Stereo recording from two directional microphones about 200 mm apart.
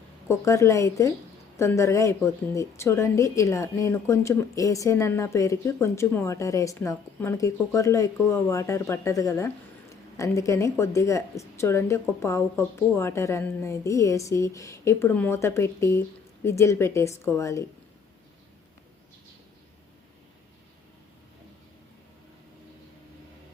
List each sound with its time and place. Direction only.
0.3 s a woman's voice: 15° left (ahead or behind)